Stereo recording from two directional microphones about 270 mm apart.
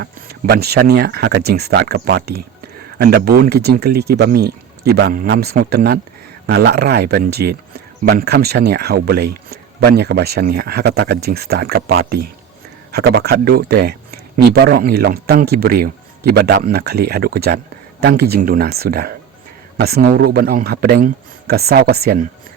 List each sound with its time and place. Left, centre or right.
0.0 s speech: right